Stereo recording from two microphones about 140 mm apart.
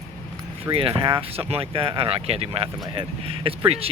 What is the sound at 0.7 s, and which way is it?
Speech, 40° right (ahead or behind).